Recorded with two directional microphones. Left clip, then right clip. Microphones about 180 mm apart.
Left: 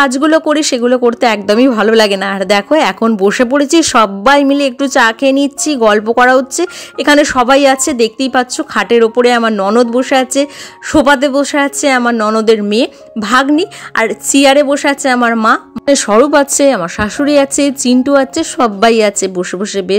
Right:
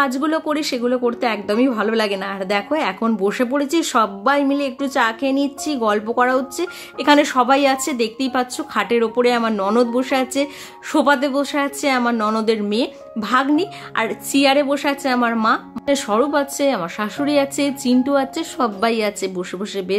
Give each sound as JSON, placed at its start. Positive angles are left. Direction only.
{"t": 0.0, "sound": "a woman's voice", "side_deg": 40}